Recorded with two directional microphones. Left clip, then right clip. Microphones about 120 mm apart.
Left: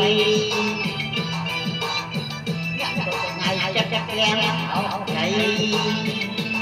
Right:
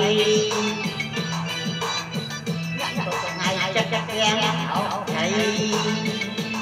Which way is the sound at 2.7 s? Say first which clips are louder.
Left 1 dB; 55° right (ahead or behind).